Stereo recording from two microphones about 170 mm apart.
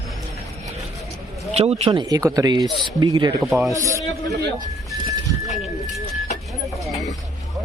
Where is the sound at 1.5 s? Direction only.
40° right (ahead or behind).